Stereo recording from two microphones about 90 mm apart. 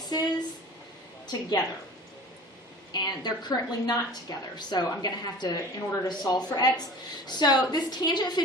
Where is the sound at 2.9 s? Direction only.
50° left (ahead or behind).